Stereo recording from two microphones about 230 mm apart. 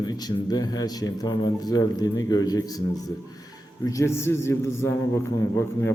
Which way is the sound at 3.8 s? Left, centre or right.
Centre.